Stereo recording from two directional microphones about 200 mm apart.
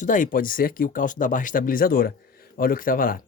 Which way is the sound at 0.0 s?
40° left (ahead or behind).